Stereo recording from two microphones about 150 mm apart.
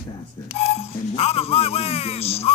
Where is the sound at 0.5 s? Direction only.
40° left (ahead or behind).